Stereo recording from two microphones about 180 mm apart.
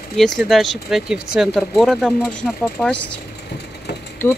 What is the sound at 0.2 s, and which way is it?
Speech, centre (ahead or behind).